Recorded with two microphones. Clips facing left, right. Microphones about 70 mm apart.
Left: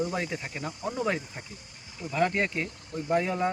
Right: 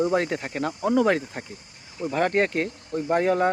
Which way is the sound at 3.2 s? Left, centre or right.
Right.